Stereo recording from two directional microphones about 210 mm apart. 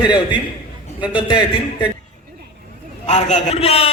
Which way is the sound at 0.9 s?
5° right (ahead or behind).